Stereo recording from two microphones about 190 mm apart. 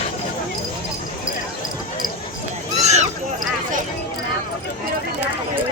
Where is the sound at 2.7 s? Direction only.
35° right (ahead or behind).